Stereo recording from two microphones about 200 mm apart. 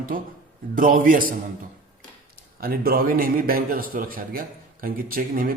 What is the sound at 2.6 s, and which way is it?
A man's voice, 50° right (ahead or behind).